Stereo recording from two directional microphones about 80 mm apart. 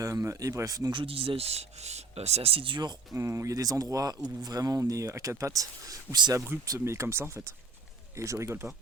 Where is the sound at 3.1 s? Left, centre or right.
Right.